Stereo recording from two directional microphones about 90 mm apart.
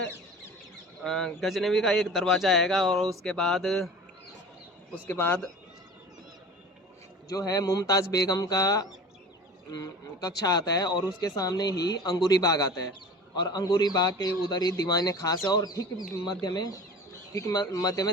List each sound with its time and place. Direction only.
1.0 s a man's voice: 5° left (ahead or behind)
5.0 s speech: 20° left (ahead or behind)
7.3 s speech: 40° left (ahead or behind)